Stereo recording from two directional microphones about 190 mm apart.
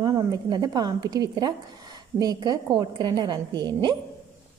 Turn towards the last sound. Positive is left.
turn(degrees=-25)  # may be behind; listen again after turning